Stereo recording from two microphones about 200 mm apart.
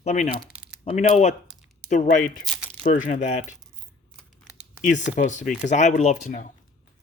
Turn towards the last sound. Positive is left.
turn(degrees=40)  # may be behind; listen again after turning